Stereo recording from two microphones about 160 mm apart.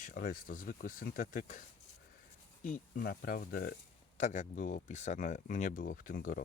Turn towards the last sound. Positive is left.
turn(degrees=55)  # may be behind; listen again after turning